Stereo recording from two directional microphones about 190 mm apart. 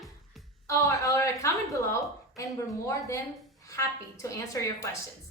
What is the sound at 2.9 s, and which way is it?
Speech, 15° left (ahead or behind).